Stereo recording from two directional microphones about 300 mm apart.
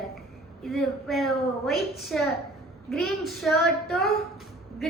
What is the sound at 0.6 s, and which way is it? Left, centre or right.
Child singing, centre.